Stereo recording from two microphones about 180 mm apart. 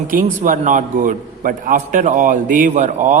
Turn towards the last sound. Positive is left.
turn(degrees=-40)  # may be behind; listen again after turning